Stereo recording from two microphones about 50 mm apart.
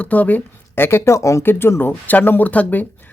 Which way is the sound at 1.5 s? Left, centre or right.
Left.